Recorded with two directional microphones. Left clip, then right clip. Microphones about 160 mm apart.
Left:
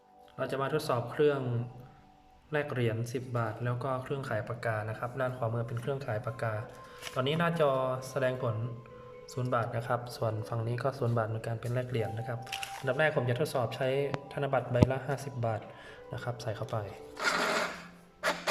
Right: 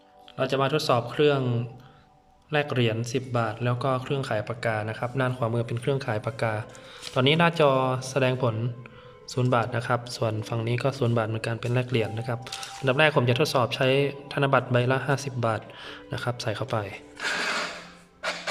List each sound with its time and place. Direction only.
0.3 s a man's voice: 5° right (ahead or behind)